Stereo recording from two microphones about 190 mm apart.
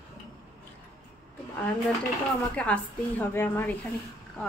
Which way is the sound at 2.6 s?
5° left (ahead or behind).